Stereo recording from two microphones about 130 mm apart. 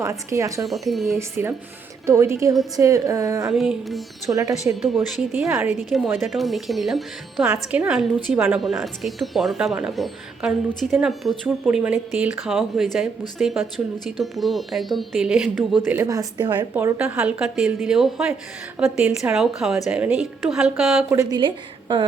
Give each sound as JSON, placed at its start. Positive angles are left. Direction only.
{"t": 0.0, "sound": "a woman's voice", "side_deg": -25}
{"t": 0.6, "sound": "a woman's voice", "side_deg": 0}
{"t": 1.1, "sound": "a woman's voice", "side_deg": -15}
{"t": 3.5, "sound": "a woman's voice", "side_deg": 0}
{"t": 4.3, "sound": "a woman's voice", "side_deg": -25}
{"t": 4.6, "sound": "a woman's voice", "side_deg": 0}
{"t": 7.4, "sound": "a woman's voice", "side_deg": -10}
{"t": 16.0, "sound": "a woman's voice", "side_deg": -30}
{"t": 16.7, "sound": "a woman's voice", "side_deg": -15}
{"t": 21.1, "sound": "a woman's voice", "side_deg": -25}
{"t": 21.3, "sound": "a woman's voice", "side_deg": -35}